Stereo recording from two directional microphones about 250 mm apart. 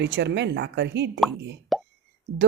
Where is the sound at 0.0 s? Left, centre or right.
Right.